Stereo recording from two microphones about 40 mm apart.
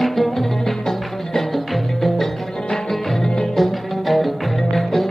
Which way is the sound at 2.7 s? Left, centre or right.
Centre.